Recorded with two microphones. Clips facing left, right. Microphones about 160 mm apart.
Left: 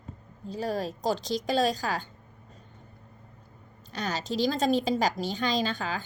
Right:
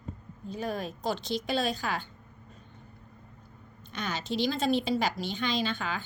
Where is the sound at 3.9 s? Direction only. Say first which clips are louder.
Left 2 dB; 40° left (ahead or behind).